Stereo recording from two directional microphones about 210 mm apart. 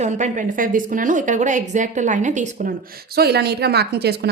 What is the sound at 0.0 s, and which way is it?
A woman's voice, 35° right (ahead or behind).